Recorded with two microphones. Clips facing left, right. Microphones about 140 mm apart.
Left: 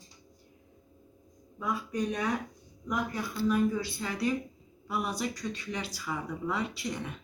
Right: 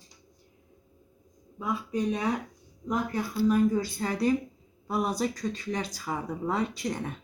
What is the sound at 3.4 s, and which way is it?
Speech, 40° right (ahead or behind).